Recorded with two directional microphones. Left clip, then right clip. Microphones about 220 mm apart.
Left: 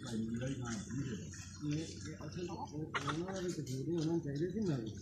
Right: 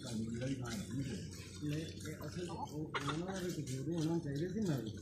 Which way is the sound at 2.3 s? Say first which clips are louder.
Left 1 dB; 40° right (ahead or behind).